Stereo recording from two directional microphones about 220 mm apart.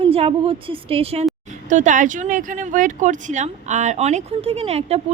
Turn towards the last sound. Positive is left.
turn(degrees=-30)  # may be behind; listen again after turning